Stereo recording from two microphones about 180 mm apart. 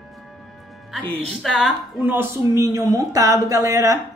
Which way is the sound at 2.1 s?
15° right (ahead or behind).